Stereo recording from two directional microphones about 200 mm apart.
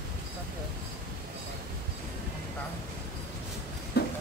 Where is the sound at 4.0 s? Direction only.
55° left (ahead or behind).